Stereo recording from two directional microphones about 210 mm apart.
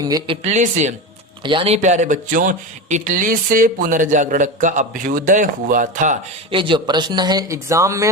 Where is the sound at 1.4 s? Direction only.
25° right (ahead or behind); by 6.1 s 40° right (ahead or behind).